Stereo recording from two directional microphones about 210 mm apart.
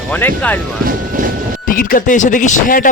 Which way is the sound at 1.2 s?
40° right (ahead or behind).